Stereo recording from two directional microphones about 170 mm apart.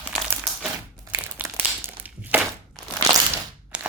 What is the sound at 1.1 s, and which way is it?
Crumpling, 10° right (ahead or behind).